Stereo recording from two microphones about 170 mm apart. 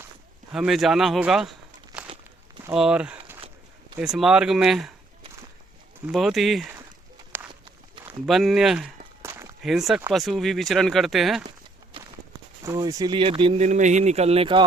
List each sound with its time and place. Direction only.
0.5 s speech: centre (ahead or behind)
2.7 s speech: 5° right (ahead or behind)
6.1 s speech: centre (ahead or behind)
8.3 s speech: centre (ahead or behind)
9.2 s walk: 15° right (ahead or behind)
9.6 s speech: centre (ahead or behind)
12.6 s speech: 20° right (ahead or behind)
13.6 s speech: 45° right (ahead or behind)